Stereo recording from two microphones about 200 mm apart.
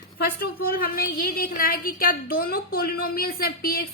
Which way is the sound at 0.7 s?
45° left (ahead or behind).